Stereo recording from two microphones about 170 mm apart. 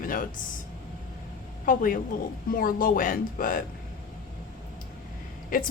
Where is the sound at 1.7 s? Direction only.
55° left (ahead or behind).